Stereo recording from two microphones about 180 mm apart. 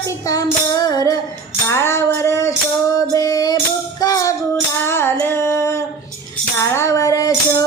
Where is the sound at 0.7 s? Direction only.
20° left (ahead or behind).